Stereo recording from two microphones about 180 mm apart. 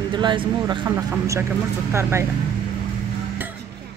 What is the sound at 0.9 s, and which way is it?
Speech, 15° right (ahead or behind).